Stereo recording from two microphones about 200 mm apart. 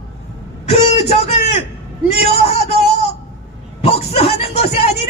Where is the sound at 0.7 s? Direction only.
30° left (ahead or behind).